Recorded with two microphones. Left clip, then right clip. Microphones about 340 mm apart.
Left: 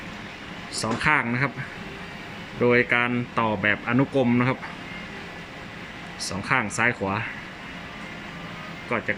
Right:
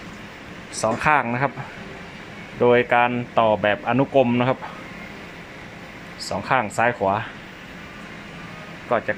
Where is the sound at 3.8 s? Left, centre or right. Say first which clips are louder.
Right 4 dB; centre.